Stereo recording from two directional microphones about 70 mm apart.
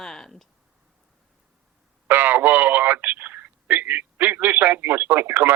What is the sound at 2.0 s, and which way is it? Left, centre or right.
Speech, right.